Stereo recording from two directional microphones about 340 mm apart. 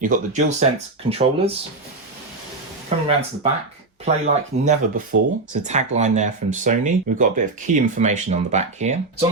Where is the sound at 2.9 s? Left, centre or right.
Centre.